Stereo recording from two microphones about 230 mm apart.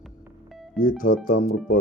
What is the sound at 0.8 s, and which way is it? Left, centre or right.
Speech, left.